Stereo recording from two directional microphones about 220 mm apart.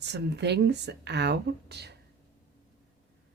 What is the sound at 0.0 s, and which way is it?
Speech, 50° right (ahead or behind).